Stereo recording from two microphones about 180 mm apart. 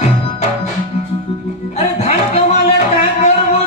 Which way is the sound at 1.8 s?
35° left (ahead or behind).